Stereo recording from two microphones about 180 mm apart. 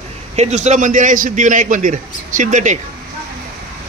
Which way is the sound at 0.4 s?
40° right (ahead or behind).